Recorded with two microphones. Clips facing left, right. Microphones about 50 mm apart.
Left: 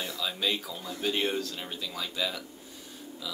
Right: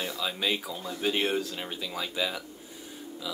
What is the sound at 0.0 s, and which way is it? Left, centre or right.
Speech, centre.